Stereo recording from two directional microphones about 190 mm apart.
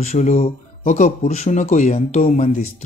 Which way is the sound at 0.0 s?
40° left (ahead or behind).